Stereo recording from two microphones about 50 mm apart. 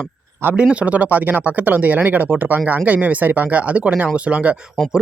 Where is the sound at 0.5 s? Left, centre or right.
Right.